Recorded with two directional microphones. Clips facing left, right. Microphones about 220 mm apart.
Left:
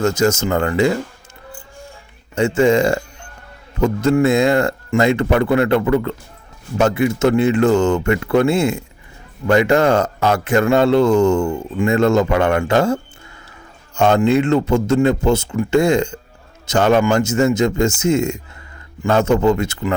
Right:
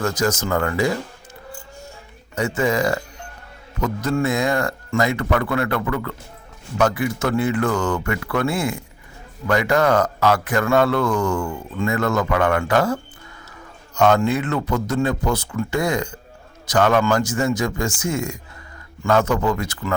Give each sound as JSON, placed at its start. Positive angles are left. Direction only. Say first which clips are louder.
{"t": 0.0, "sound": "speech", "louder": "left 5 dB", "side_deg": 25}
{"t": 2.3, "sound": "a man's voice", "louder": "left 7 dB", "side_deg": 25}